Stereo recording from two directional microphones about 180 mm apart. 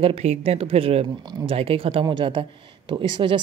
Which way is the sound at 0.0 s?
35° right (ahead or behind).